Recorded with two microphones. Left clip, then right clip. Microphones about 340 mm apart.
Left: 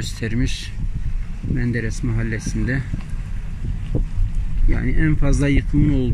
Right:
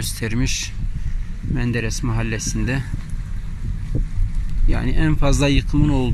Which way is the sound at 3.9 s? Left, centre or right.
Left.